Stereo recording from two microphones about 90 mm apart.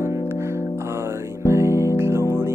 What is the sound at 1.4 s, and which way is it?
Music, 30° right (ahead or behind).